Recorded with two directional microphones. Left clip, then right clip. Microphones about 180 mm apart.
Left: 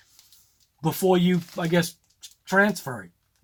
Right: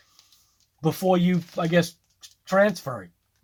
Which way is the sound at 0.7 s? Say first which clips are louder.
Even; 45° right (ahead or behind).